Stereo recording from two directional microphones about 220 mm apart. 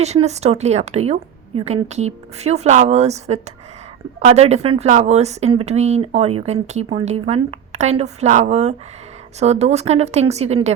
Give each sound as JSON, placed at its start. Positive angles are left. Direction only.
{"t": 0.0, "sound": "speech", "side_deg": -30}